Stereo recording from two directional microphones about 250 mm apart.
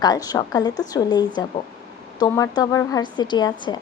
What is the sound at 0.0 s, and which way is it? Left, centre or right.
A woman's voice, centre.